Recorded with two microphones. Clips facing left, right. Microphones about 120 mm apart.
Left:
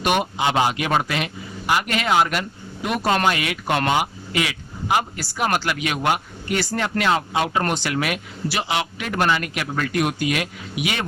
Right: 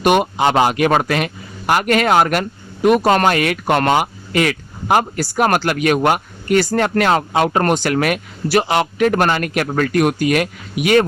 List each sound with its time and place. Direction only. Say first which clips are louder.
0.0 s speech: right 7 dB; 50° right (ahead or behind)